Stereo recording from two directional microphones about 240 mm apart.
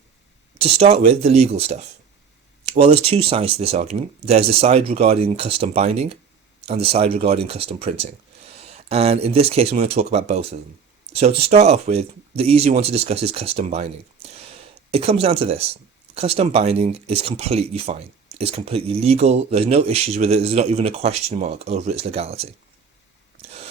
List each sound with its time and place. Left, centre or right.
0.6 s speech: right